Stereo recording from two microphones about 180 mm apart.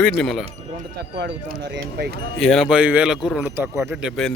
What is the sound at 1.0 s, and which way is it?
Speech, 65° right (ahead or behind).